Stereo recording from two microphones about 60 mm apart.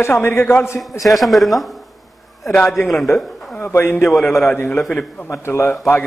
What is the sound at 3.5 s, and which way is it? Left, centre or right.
Speech, left.